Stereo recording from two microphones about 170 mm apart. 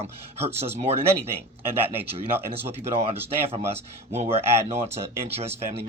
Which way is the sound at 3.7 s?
40° right (ahead or behind).